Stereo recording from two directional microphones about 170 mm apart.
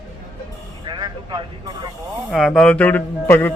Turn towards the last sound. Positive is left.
turn(degrees=10)  # may be behind; listen again after turning